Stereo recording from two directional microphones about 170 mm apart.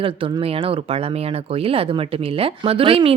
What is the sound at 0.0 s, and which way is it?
Speech, 35° right (ahead or behind).